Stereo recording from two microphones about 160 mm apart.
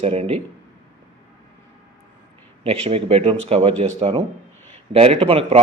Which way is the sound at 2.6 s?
40° right (ahead or behind).